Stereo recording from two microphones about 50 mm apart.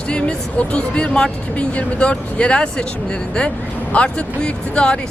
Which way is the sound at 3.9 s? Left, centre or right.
Left.